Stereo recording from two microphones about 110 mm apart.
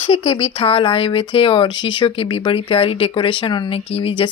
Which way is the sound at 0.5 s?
55° left (ahead or behind).